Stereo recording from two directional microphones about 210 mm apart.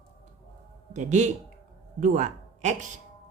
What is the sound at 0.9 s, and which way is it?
Speech, 35° right (ahead or behind).